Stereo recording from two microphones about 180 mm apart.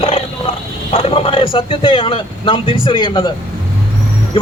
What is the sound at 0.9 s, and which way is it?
A man's voice, 35° left (ahead or behind).